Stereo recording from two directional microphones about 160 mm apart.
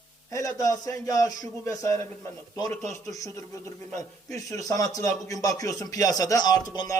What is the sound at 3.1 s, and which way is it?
A man's voice, 20° left (ahead or behind).